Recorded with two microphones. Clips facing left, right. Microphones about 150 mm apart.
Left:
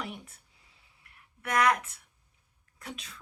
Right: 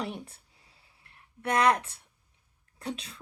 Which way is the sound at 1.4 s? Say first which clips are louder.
Right 2 dB; 30° right (ahead or behind).